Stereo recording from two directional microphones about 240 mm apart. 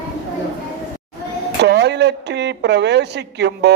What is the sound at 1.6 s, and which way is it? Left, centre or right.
A woman's voice, right.